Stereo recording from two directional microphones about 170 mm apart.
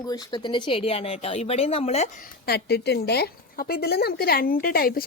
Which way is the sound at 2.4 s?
70° left (ahead or behind).